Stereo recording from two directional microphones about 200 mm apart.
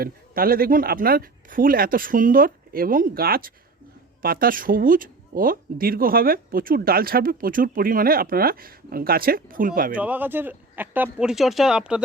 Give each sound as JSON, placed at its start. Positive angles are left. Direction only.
{"t": 0.0, "sound": "speech", "side_deg": -45}
{"t": 9.9, "sound": "speech", "side_deg": -10}